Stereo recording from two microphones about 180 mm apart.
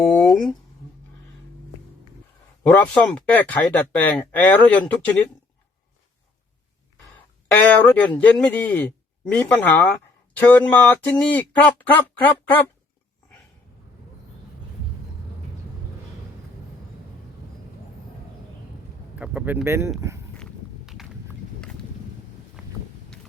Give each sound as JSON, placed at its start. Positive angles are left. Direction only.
{"t": 0.1, "sound": "speech", "side_deg": 5}
{"t": 2.6, "sound": "a man's voice", "side_deg": 10}
{"t": 7.5, "sound": "a man's voice", "side_deg": 10}
{"t": 19.2, "sound": "speech", "side_deg": -10}
{"t": 20.0, "sound": "a sound", "side_deg": -15}
{"t": 20.3, "sound": "walk", "side_deg": 0}
{"t": 22.6, "sound": "vehicle", "side_deg": -5}